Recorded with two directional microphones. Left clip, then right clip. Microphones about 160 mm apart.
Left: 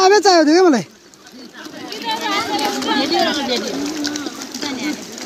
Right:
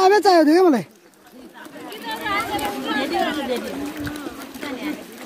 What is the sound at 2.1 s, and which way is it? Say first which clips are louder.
Children playing: left 4 dB; 45° right (ahead or behind).